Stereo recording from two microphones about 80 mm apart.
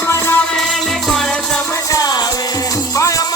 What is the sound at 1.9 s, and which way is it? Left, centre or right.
Music, left.